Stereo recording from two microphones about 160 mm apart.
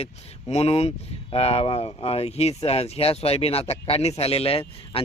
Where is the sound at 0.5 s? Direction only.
40° left (ahead or behind).